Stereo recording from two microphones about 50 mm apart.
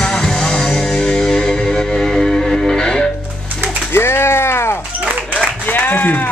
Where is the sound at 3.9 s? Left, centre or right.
Left.